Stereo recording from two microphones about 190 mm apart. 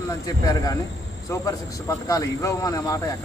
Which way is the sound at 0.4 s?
20° left (ahead or behind).